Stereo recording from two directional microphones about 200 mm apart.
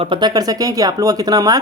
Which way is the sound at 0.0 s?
25° right (ahead or behind).